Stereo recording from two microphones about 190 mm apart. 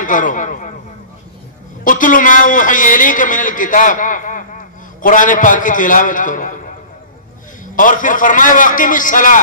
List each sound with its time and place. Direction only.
0.0 s a man's voice: 45° left (ahead or behind)
1.9 s a man's voice: 45° left (ahead or behind)